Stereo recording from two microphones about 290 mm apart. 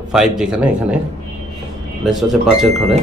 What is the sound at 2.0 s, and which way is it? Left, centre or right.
Speech, centre.